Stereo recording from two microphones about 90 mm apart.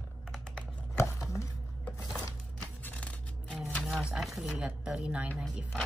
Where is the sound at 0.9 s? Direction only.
35° left (ahead or behind).